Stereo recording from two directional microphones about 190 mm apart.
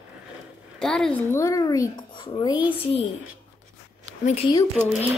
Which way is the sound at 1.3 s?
15° left (ahead or behind).